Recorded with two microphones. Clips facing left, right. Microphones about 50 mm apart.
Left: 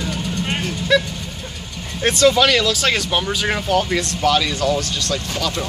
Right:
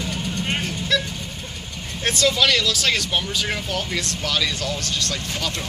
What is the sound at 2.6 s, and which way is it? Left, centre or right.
Speech, left.